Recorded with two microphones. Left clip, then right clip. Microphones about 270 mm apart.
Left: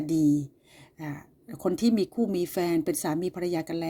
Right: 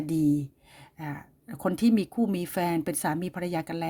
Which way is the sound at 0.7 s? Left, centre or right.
Right.